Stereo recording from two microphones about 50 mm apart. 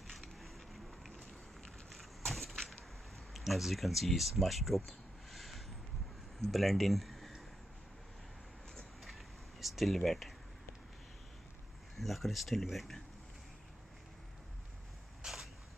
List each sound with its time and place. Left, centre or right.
0.0 s a sound: centre
1.9 s vehicle: centre
3.3 s speech: centre
9.6 s speech: centre
12.0 s speech: centre
15.2 s a sound: centre